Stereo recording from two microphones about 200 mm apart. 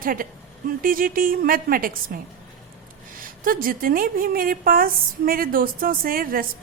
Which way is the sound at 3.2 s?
45° right (ahead or behind).